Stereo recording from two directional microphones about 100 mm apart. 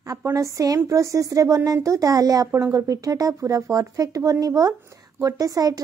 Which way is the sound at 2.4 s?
20° right (ahead or behind).